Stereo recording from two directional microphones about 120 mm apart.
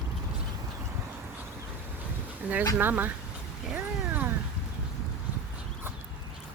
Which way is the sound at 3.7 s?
15° right (ahead or behind).